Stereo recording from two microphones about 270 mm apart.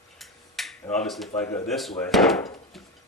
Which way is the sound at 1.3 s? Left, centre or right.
Centre.